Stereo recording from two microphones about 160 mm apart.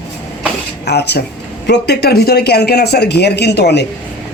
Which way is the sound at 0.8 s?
90° left.